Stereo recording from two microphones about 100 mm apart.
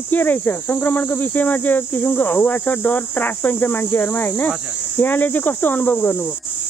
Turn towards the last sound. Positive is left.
turn(degrees=20)  # may be behind; listen again after turning